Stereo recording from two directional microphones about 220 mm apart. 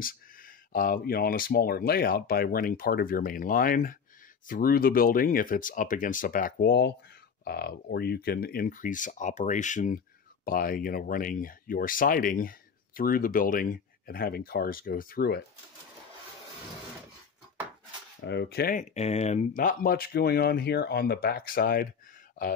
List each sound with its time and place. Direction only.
0.7 s speech: 40° left (ahead or behind)
18.2 s speech: 50° left (ahead or behind)